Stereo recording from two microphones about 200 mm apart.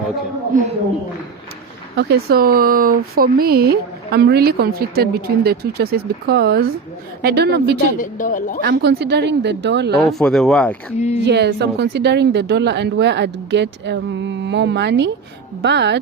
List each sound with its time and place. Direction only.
2.0 s speech: 55° right (ahead or behind)
7.9 s speech: 40° left (ahead or behind)
8.6 s speech: 55° right (ahead or behind)
10.1 s speech: centre (ahead or behind)
10.9 s speech: 35° left (ahead or behind)
11.3 s speech: 55° right (ahead or behind)